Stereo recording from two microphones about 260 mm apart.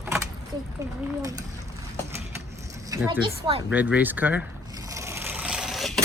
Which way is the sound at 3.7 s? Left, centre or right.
Centre.